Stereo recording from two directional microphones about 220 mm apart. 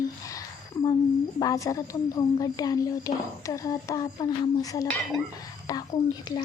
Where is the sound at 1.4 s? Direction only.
15° left (ahead or behind).